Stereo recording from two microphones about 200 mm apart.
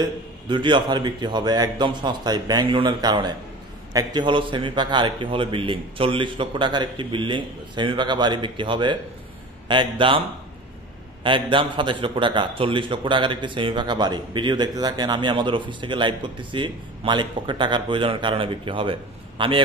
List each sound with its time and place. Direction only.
0.0 s a man's voice: 25° right (ahead or behind)
11.2 s a man's voice: 25° right (ahead or behind)